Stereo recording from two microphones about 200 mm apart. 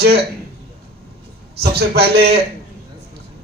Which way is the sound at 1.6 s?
55° right (ahead or behind).